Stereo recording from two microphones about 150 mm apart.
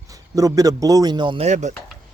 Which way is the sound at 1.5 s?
50° right (ahead or behind).